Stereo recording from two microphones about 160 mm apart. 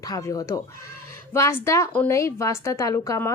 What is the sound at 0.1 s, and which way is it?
A woman's voice, 20° left (ahead or behind).